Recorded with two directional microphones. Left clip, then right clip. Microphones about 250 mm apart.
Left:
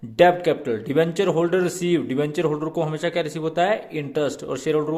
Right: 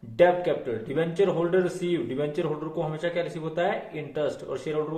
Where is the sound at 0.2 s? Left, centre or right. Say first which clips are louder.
Left 4 dB; left.